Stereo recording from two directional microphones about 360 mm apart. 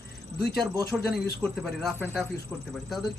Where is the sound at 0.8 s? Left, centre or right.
Left.